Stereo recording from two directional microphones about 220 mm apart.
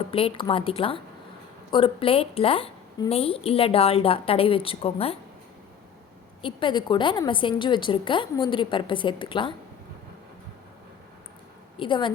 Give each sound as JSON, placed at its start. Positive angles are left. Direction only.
{"t": 0.1, "sound": "a woman's voice", "side_deg": 25}
{"t": 6.4, "sound": "a woman's voice", "side_deg": 20}
{"t": 11.8, "sound": "a woman's voice", "side_deg": 20}